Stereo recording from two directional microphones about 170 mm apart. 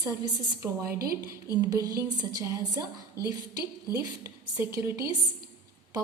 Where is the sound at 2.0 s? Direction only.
20° right (ahead or behind).